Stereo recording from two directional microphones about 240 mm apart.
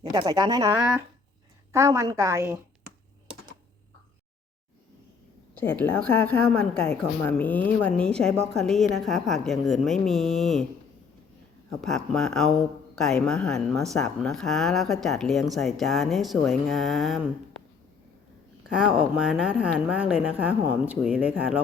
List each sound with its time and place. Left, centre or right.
0.0 s speech: centre
5.5 s a woman's voice: centre
11.8 s a woman's voice: centre
18.7 s a woman's voice: centre